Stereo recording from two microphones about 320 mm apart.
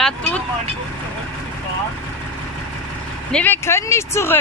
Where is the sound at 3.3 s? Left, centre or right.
Centre.